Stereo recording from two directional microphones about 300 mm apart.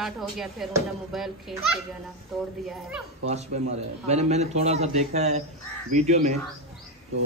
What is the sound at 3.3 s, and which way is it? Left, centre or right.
A man's voice, right.